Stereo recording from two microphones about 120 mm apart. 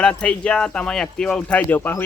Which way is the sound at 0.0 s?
10° left (ahead or behind).